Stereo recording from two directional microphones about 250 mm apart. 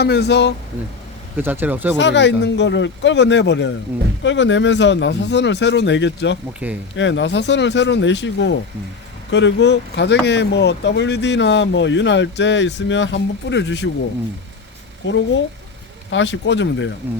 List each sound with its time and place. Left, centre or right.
0.0 s speech: left
1.4 s speech: centre
2.0 s speech: left
15.0 s speech: left